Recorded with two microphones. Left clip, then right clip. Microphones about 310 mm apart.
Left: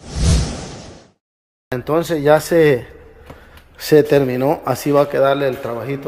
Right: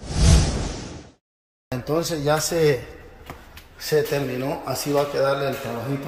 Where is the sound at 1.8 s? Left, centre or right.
Left.